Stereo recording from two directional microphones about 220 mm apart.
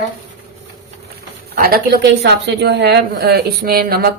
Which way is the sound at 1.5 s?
45° right (ahead or behind).